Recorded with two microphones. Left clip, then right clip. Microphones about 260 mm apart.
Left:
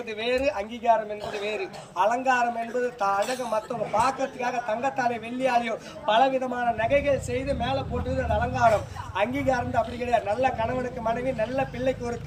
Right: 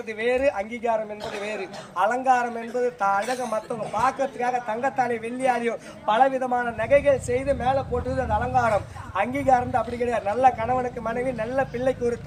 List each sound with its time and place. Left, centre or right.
0.2 s speech: centre
2.0 s speech: centre